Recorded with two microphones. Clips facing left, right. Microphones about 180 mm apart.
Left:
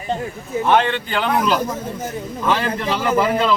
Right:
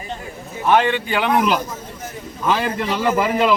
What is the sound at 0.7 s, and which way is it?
A man's voice, 10° right (ahead or behind).